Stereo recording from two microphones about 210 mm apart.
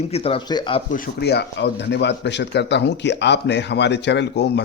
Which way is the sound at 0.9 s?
45° left (ahead or behind).